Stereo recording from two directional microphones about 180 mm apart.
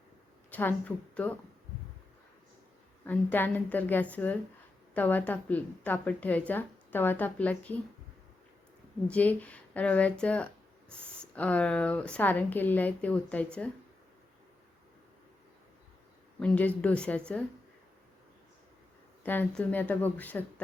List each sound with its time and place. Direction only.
0.5 s speech: 10° left (ahead or behind)
3.0 s speech: 10° left (ahead or behind)
9.0 s speech: 10° left (ahead or behind)
16.4 s speech: 10° left (ahead or behind)
19.2 s speech: 10° left (ahead or behind)